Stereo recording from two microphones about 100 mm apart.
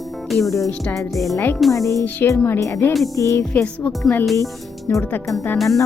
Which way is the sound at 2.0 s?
20° left (ahead or behind).